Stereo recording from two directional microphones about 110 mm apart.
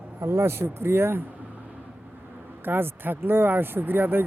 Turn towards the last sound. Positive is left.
turn(degrees=-20)  # may be behind; listen again after turning